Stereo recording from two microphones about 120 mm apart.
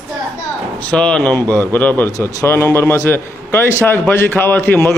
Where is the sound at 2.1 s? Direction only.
25° left (ahead or behind).